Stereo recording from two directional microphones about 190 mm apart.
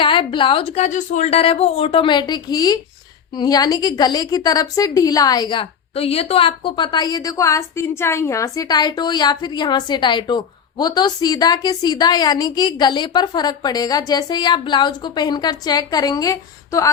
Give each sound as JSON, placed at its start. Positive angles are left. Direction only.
{"t": 0.0, "sound": "a woman's voice", "side_deg": 25}